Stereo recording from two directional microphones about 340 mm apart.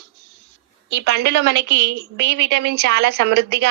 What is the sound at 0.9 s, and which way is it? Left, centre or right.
A woman's voice, right.